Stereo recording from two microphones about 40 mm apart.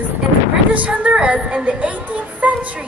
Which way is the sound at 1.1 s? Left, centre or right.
Right.